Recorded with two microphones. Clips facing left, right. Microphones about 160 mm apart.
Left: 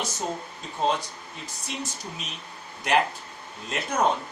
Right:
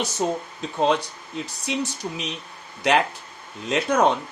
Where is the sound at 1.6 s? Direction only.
75° right (ahead or behind).